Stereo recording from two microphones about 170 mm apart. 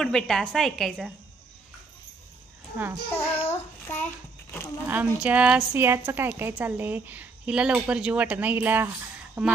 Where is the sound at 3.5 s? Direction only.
15° left (ahead or behind).